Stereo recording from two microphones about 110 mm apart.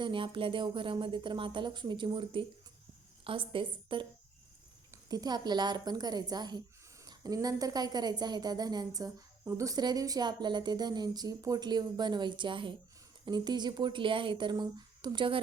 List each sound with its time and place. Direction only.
0.0 s a woman's voice: 50° right (ahead or behind)
5.0 s a woman's voice: 35° right (ahead or behind)